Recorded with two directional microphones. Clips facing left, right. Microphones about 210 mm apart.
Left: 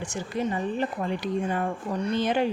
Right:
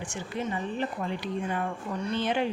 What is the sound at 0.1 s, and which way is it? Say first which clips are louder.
Speech: left 4 dB; 40° left (ahead or behind).